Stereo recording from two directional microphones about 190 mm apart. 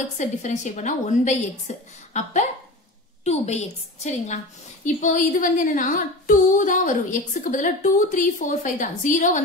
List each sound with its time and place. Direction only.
0.2 s a woman's voice: 40° left (ahead or behind)